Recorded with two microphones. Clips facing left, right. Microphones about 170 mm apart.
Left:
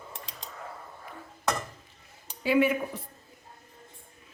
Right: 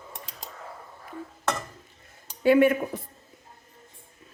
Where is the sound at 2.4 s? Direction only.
50° right (ahead or behind).